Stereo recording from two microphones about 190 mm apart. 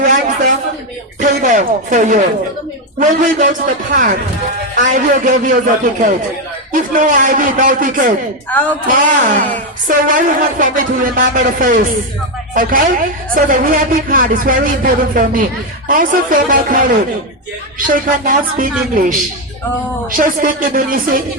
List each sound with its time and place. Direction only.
0.0 s a sound: 45° right (ahead or behind)
1.2 s speech: 40° right (ahead or behind)
4.7 s speech: 40° right (ahead or behind)
8.4 s speech: 10° left (ahead or behind)
8.9 s speech: 45° right (ahead or behind)